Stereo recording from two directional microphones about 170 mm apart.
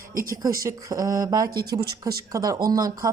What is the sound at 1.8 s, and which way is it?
Speech, 70° right (ahead or behind).